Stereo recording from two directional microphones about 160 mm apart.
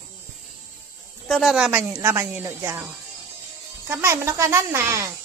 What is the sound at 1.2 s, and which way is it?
Speech, centre (ahead or behind).